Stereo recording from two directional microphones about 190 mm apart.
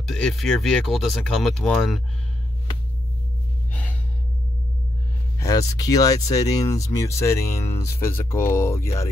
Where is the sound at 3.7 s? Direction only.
10° left (ahead or behind).